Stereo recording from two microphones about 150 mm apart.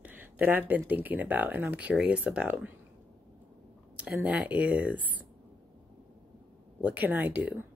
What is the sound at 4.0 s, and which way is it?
Speech, 10° right (ahead or behind).